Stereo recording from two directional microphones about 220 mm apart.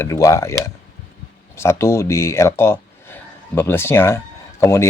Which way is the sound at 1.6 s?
10° left (ahead or behind).